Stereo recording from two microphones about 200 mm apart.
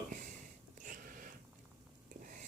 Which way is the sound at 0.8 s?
40° right (ahead or behind).